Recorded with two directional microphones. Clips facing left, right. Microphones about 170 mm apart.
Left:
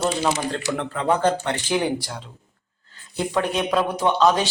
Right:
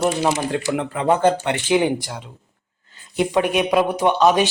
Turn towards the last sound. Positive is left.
turn(degrees=-15)  # may be behind; listen again after turning